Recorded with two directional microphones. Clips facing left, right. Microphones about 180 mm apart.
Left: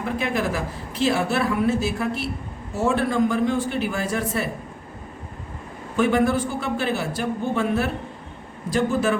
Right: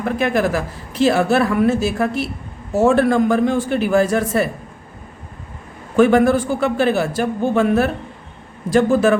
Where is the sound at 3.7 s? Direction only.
80° right.